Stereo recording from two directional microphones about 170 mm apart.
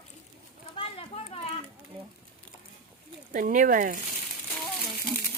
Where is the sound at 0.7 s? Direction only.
35° left (ahead or behind).